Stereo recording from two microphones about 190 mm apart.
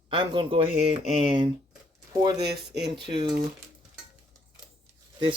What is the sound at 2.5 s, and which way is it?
Speech, 60° right (ahead or behind).